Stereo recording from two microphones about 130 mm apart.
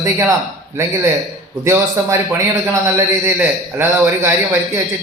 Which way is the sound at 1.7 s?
20° right (ahead or behind).